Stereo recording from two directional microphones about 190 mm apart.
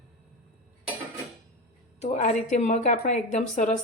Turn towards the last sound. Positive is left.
turn(degrees=40)  # may be behind; listen again after turning